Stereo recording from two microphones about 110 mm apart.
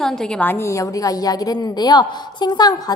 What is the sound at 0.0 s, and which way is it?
A woman's voice, 5° left (ahead or behind).